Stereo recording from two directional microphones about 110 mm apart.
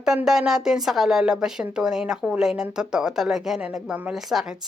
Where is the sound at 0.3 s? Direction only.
5° right (ahead or behind).